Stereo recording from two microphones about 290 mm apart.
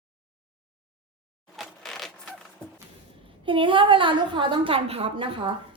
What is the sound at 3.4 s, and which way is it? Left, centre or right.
A woman's voice, centre.